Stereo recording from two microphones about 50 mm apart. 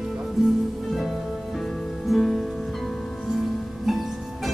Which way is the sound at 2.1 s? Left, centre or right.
Centre.